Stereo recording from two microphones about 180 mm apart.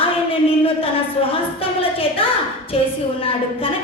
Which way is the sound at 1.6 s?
30° left (ahead or behind).